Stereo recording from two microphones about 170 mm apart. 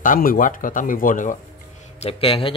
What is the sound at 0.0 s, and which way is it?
Speech, 55° left (ahead or behind).